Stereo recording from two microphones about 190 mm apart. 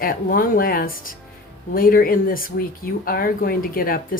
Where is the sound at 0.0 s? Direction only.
50° left (ahead or behind).